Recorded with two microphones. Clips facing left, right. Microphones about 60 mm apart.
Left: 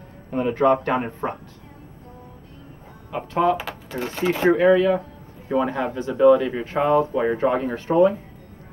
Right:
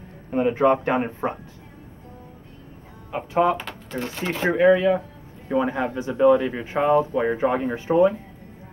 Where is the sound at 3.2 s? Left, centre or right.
Centre.